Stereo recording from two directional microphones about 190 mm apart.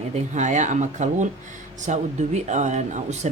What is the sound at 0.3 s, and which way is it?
Speech, 40° right (ahead or behind).